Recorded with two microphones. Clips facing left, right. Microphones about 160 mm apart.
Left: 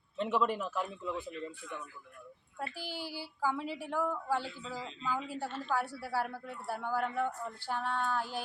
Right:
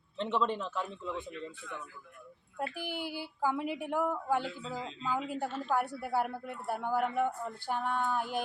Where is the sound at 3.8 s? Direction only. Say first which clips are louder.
Right 1 dB; 15° right (ahead or behind).